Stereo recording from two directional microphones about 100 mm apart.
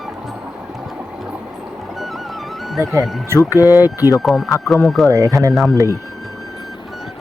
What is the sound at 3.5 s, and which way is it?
Speech, 35° left (ahead or behind).